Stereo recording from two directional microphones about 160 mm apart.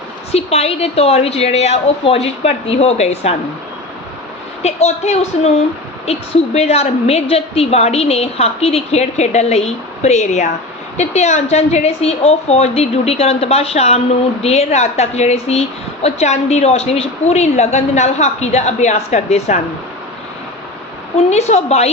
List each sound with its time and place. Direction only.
0.3 s a woman's voice: 40° left (ahead or behind)
4.6 s a woman's voice: 40° left (ahead or behind)
21.2 s a woman's voice: 45° left (ahead or behind)